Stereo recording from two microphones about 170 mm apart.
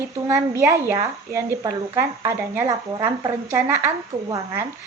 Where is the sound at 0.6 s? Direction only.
15° right (ahead or behind).